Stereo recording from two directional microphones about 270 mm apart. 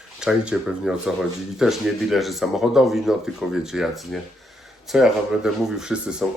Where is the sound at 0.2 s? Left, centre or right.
Centre.